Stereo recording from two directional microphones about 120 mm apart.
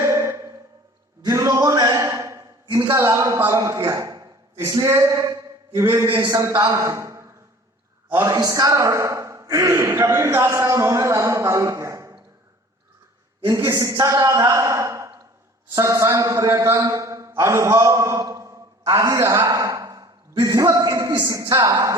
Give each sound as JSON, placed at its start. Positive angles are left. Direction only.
{"t": 0.0, "sound": "a sound", "side_deg": -25}
{"t": 1.2, "sound": "a man's voice", "side_deg": -30}
{"t": 4.7, "sound": "a sound", "side_deg": -25}
{"t": 6.2, "sound": "a man's voice", "side_deg": -30}
{"t": 13.5, "sound": "a woman's voice", "side_deg": -20}
{"t": 13.7, "sound": "a man's voice", "side_deg": -30}